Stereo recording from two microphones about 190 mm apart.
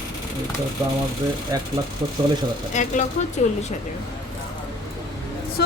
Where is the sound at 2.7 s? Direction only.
40° left (ahead or behind).